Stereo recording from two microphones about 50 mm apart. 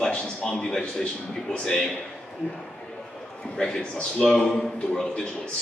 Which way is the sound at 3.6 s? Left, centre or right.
Centre.